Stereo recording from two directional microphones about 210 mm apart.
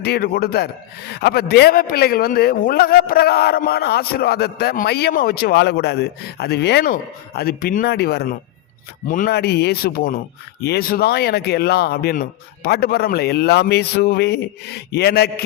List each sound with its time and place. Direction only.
0.0 s a man's voice: 50° left (ahead or behind)